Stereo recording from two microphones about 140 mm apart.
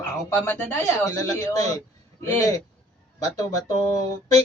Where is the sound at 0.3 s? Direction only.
15° left (ahead or behind).